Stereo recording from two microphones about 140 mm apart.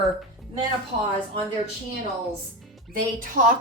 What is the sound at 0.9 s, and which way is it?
Speech, 70° right (ahead or behind).